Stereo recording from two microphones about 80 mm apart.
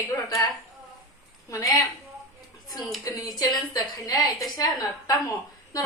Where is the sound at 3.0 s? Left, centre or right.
Left.